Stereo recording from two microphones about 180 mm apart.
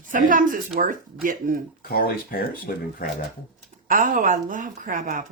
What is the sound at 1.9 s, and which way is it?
Speech, 55° left (ahead or behind).